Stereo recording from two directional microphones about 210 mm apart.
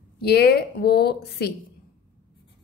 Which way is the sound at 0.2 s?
50° left (ahead or behind).